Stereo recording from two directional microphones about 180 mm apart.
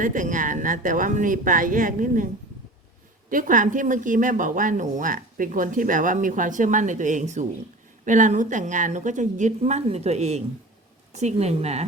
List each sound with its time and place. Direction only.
0.0 s a woman's voice: 45° right (ahead or behind)